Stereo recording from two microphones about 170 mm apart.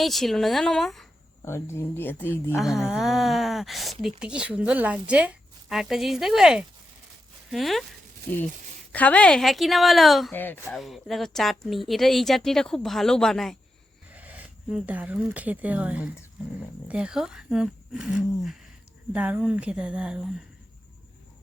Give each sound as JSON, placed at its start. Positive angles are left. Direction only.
{"t": 0.0, "sound": "speech", "side_deg": 0}
{"t": 1.4, "sound": "speech", "side_deg": 15}
{"t": 2.6, "sound": "speech", "side_deg": 0}
{"t": 10.3, "sound": "speech", "side_deg": 10}
{"t": 10.8, "sound": "speech", "side_deg": 0}
{"t": 14.1, "sound": "speech", "side_deg": -10}